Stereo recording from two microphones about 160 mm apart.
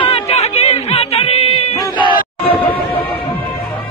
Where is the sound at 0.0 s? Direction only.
40° left (ahead or behind).